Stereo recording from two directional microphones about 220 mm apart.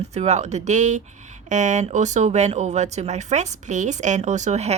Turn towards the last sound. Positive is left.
turn(degrees=-30)  # may be behind; listen again after turning